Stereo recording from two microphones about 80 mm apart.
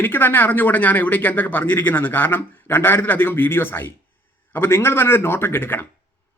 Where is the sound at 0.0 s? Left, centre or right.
Left.